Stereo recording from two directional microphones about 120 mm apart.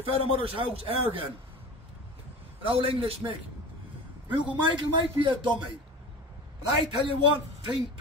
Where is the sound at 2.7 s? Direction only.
50° right (ahead or behind).